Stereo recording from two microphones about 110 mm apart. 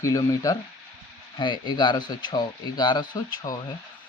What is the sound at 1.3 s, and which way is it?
Speech, 45° left (ahead or behind).